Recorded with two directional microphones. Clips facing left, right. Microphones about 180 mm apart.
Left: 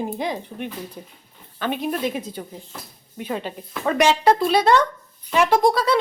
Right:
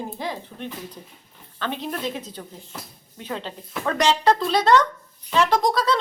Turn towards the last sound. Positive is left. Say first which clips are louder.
# left 3 dB
turn(degrees=10)  # may be behind; listen again after turning